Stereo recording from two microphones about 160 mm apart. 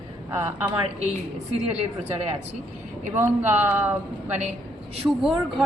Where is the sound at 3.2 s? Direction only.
10° right (ahead or behind).